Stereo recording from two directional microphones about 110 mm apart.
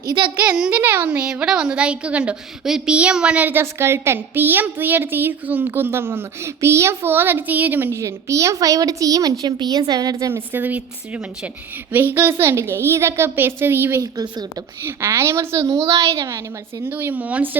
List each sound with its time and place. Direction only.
0.3 s a child's voice: 10° right (ahead or behind); by 10.4 s 30° right (ahead or behind)
10.5 s a child's voice: 15° right (ahead or behind)
14.0 s a woman's voice: 30° right (ahead or behind)
16.9 s a child's voice: 20° right (ahead or behind)